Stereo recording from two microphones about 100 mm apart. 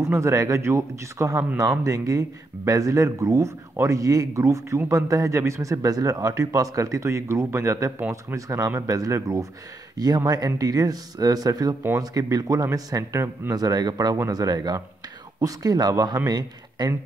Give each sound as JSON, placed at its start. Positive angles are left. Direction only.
{"t": 0.0, "sound": "speech", "side_deg": -30}
{"t": 9.9, "sound": "speech", "side_deg": -40}
{"t": 13.5, "sound": "speech", "side_deg": -40}